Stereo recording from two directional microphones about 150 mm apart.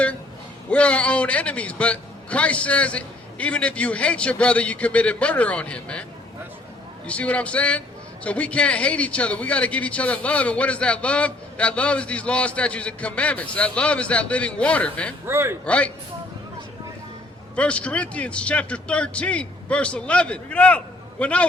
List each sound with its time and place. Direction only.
0.7 s speech: 10° left (ahead or behind)
7.1 s speech: 10° left (ahead or behind)
15.3 s a man's voice: 15° right (ahead or behind)
15.6 s speech: 10° left (ahead or behind)
17.5 s speech: 10° left (ahead or behind)